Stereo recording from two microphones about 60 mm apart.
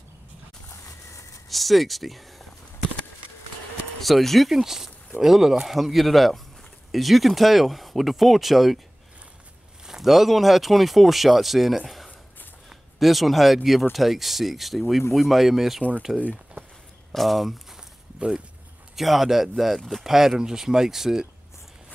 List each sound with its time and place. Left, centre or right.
0.8 s a sound: left
1.5 s speech: centre
4.0 s speech: centre
9.8 s speech: centre
16.6 s a sound: right
17.1 s speech: centre
18.9 s speech: centre